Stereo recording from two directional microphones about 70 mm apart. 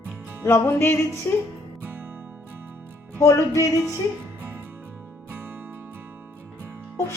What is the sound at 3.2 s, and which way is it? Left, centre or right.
Speech, left.